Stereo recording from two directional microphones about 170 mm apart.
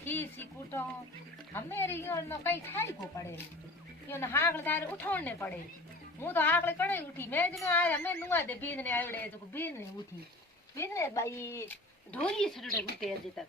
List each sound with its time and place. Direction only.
0.0 s a woman's voice: 10° left (ahead or behind)